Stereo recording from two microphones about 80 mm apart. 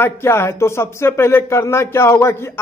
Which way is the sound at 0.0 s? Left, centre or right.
Left.